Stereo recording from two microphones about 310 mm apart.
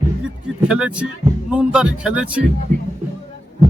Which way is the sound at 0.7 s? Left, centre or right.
Centre.